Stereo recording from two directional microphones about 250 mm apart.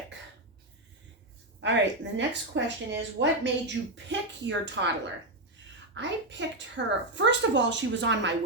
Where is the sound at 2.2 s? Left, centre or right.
Right.